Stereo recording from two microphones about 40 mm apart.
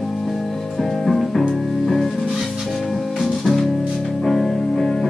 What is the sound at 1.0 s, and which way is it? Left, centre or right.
Music, centre.